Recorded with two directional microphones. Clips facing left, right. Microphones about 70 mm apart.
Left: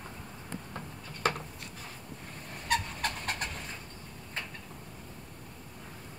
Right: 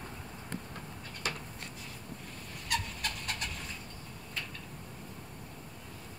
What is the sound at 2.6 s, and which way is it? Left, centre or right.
Vehicle, left.